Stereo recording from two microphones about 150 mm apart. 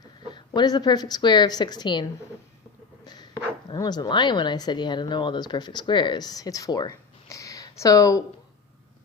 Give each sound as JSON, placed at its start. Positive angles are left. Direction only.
{"t": 0.3, "sound": "a woman's voice", "side_deg": 30}
{"t": 3.1, "sound": "speech", "side_deg": 25}